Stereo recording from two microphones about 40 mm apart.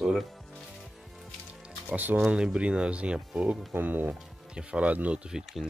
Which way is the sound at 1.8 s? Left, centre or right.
Right.